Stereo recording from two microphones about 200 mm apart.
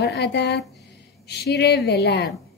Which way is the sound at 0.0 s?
60° left (ahead or behind).